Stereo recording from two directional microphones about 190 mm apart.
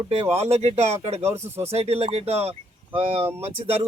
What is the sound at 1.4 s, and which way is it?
Speech, 15° right (ahead or behind).